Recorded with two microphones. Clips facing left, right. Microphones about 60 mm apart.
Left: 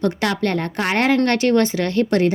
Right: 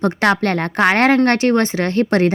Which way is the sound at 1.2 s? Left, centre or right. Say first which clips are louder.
Right 2 dB; right.